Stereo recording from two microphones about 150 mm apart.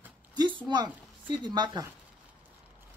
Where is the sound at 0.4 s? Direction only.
30° right (ahead or behind).